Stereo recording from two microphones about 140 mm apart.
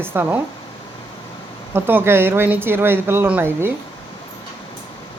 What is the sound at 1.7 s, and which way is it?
Speech, 15° right (ahead or behind).